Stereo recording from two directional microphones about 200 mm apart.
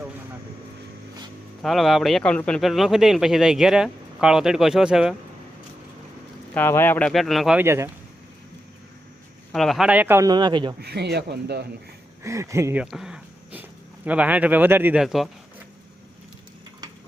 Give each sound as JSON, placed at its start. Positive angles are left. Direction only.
{"t": 1.6, "sound": "speech", "side_deg": 0}
{"t": 6.5, "sound": "speech", "side_deg": 10}
{"t": 9.5, "sound": "a man's voice", "side_deg": 0}
{"t": 10.8, "sound": "speech", "side_deg": -55}
{"t": 12.2, "sound": "speech", "side_deg": -15}